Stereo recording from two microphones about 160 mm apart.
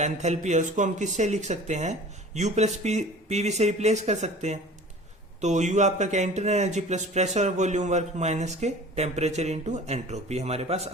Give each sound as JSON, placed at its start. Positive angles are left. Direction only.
{"t": 0.0, "sound": "speech", "side_deg": -45}